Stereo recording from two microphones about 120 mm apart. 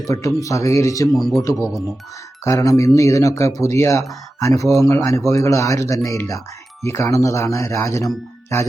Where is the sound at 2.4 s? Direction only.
25° left (ahead or behind).